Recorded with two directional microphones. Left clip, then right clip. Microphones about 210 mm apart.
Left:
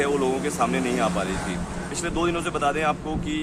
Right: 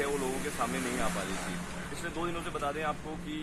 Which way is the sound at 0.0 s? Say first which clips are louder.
Left 10 dB; 25° left (ahead or behind).